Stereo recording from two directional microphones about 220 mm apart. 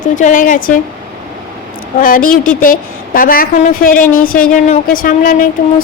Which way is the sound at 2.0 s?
40° left (ahead or behind).